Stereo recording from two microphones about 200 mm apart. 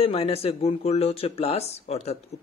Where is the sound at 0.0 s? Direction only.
30° left (ahead or behind).